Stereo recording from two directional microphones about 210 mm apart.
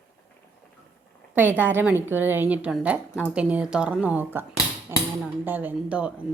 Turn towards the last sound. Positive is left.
turn(degrees=-5)  # may be behind; listen again after turning